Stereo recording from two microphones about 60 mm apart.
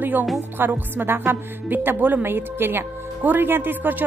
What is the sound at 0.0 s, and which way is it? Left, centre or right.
A woman's voice, right.